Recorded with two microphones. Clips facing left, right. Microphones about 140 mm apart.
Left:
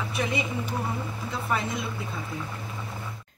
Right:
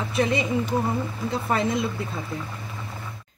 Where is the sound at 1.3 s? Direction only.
35° right (ahead or behind).